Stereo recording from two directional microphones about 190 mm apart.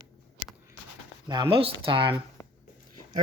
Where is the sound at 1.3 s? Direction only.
20° right (ahead or behind).